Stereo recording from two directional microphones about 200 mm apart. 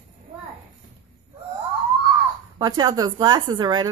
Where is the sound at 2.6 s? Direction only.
20° right (ahead or behind).